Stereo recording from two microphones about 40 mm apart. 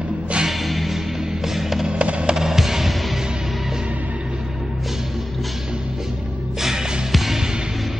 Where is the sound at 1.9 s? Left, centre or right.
Right.